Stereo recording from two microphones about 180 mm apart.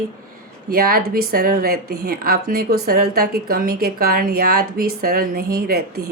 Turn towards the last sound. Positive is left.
turn(degrees=-60)  # may be behind; listen again after turning